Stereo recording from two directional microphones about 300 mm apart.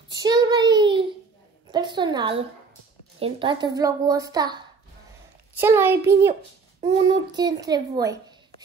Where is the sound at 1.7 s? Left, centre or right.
Centre.